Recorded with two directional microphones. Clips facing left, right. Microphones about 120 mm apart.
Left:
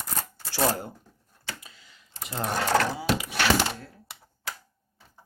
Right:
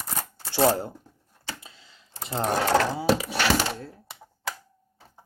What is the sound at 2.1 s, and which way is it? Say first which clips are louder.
Sewing machine: right 5 dB; 30° right (ahead or behind).